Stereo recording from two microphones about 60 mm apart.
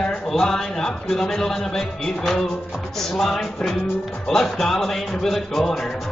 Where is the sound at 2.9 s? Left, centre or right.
Centre.